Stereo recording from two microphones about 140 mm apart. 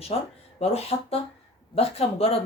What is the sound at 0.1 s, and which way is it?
Speech, 50° left (ahead or behind).